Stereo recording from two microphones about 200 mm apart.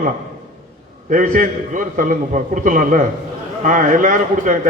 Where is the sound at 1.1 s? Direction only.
40° right (ahead or behind).